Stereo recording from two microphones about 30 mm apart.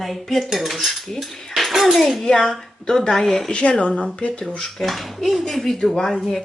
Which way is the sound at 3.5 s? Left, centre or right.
Left.